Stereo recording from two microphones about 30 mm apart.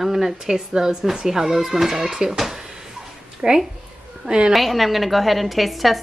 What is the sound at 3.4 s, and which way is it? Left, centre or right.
A woman's voice, right.